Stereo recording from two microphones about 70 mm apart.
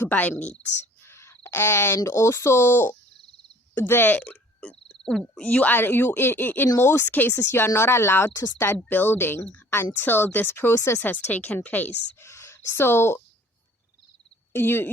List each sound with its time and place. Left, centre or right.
0.0 s speech: left
1.0 s a sound: left
1.5 s speech: left
4.2 s frog: centre
5.4 s speech: centre; by 11.0 s left
11.0 s speech: left
12.2 s speech: left
14.5 s speech: left